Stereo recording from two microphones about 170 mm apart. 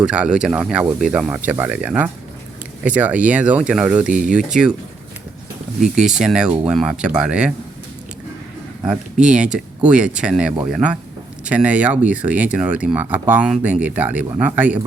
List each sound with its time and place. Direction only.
0.0 s speech: 5° right (ahead or behind)
4.1 s speech: 45° right (ahead or behind)
4.4 s speech: 5° right (ahead or behind)
5.8 s speech: 5° right (ahead or behind)
8.9 s speech: 5° right (ahead or behind)